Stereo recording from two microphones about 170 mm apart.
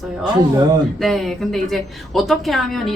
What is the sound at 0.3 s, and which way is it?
Speech, 20° right (ahead or behind).